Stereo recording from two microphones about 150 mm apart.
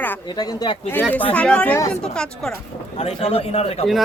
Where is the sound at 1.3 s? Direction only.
10° left (ahead or behind).